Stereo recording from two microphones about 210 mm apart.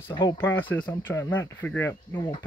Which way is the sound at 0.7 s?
10° left (ahead or behind).